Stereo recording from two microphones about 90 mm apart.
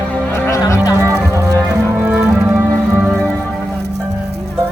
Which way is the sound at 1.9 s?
20° right (ahead or behind).